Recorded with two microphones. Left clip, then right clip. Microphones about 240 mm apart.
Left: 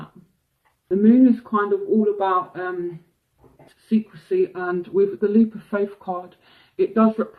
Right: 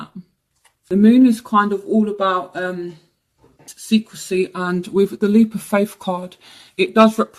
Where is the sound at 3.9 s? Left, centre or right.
Right.